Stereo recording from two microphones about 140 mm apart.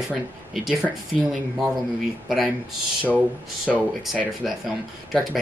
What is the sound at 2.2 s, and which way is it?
Speech, centre (ahead or behind).